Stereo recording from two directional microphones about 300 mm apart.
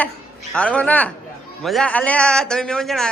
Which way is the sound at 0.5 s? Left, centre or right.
Centre.